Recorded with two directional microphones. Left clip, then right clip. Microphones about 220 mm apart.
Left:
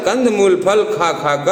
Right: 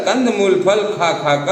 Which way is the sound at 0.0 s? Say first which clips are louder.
Left 2 dB; 50° left (ahead or behind).